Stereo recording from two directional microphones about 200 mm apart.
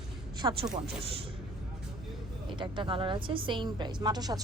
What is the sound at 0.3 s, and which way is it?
Speech, 20° right (ahead or behind).